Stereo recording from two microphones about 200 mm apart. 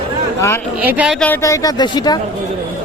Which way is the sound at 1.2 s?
10° left (ahead or behind).